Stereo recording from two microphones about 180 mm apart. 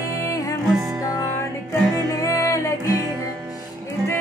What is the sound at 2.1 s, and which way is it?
Music, 15° left (ahead or behind).